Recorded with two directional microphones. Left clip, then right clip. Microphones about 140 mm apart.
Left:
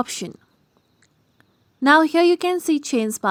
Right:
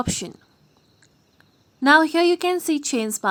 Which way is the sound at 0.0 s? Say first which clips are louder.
Left 1 dB; 40° left (ahead or behind).